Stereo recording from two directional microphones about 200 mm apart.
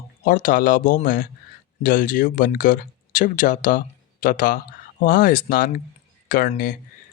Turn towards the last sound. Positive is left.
turn(degrees=45)  # may be behind; listen again after turning